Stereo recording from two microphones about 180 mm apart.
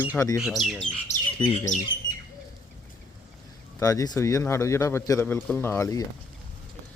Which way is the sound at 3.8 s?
20° left (ahead or behind).